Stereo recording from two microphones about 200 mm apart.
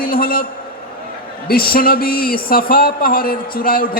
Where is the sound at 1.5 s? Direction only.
45° left (ahead or behind).